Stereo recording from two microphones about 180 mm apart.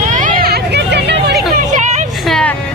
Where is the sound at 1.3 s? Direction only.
65° right (ahead or behind).